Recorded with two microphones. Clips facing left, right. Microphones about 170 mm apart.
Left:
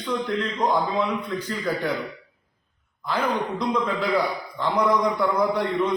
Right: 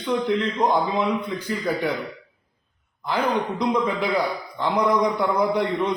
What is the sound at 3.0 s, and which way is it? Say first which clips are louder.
A man's voice: right 2 dB; 15° right (ahead or behind).